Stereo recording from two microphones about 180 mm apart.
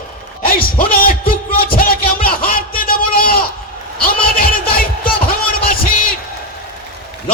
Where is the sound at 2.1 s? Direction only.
55° left (ahead or behind).